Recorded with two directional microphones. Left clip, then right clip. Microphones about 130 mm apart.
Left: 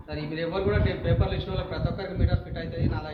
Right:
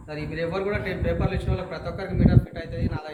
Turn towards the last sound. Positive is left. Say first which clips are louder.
# even
turn(degrees=-25)  # may be behind; listen again after turning